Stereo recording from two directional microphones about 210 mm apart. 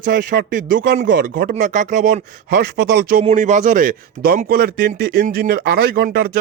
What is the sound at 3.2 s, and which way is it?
Speech, 35° right (ahead or behind).